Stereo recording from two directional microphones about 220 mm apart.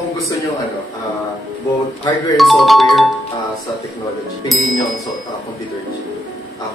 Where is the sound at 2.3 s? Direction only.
Centre (ahead or behind).